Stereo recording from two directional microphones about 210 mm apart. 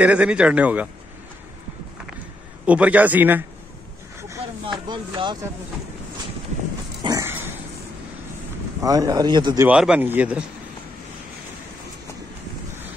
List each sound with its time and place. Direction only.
0.0 s speech: 5° right (ahead or behind)
2.6 s speech: 5° right (ahead or behind)
4.8 s speech: 20° right (ahead or behind)
7.0 s dog: 15° right (ahead or behind)
8.8 s speech: 15° right (ahead or behind)
9.7 s speech: 5° right (ahead or behind)